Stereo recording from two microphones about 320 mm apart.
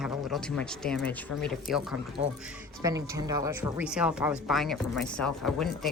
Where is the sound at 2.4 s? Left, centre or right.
Centre.